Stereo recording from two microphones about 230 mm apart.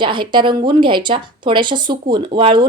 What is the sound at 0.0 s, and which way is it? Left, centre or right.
A woman's voice, right.